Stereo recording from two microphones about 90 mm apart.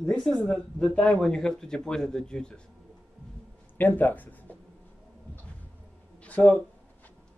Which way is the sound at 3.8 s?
20° left (ahead or behind).